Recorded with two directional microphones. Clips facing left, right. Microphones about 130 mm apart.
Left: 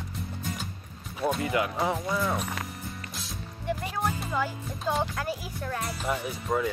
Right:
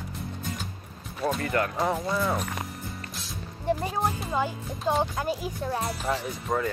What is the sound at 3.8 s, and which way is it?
Music, 30° right (ahead or behind).